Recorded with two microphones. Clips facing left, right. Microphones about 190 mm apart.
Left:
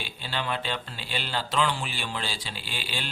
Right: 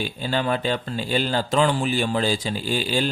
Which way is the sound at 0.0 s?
45° right (ahead or behind).